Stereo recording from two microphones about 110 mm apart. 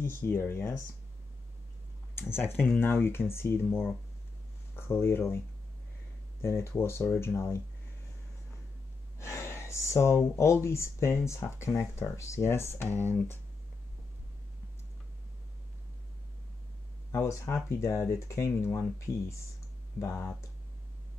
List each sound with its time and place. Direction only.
0.0 s speech: 20° left (ahead or behind)
2.1 s speech: 20° left (ahead or behind)
6.4 s speech: 25° left (ahead or behind)
9.2 s speech: 25° left (ahead or behind)
17.1 s speech: 25° left (ahead or behind)